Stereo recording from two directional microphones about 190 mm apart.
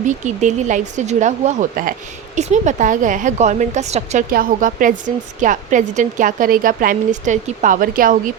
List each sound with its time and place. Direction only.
0.0 s speech: 40° right (ahead or behind)
4.3 s a woman's voice: 45° right (ahead or behind)